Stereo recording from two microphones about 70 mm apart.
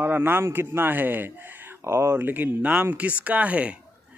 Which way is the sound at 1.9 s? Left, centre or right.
Right.